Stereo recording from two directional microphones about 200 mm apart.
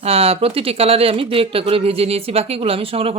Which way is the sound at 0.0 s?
30° right (ahead or behind).